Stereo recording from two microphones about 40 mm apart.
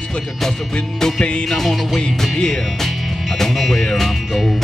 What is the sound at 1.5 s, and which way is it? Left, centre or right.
Music, centre.